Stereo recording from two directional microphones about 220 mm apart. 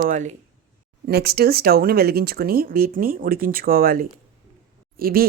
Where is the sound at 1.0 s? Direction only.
45° right (ahead or behind).